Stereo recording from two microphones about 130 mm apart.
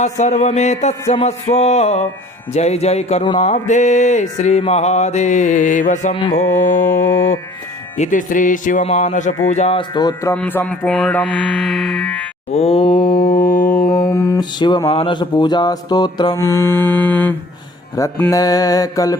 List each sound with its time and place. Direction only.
0.0 s music: 60° left (ahead or behind)
6.5 s mantra: 25° left (ahead or behind)
7.9 s music: 80° left
8.8 s speech: 60° left (ahead or behind)
9.5 s music: 60° left (ahead or behind)
9.7 s mantra: 35° left (ahead or behind)
10.3 s music: 15° left (ahead or behind)
12.5 s mantra: 50° left (ahead or behind); by 13.2 s 35° left (ahead or behind)
13.4 s music: 90° left
13.9 s mantra: 30° left (ahead or behind)
16.4 s music: 20° left (ahead or behind)
18.3 s mantra: 25° left (ahead or behind)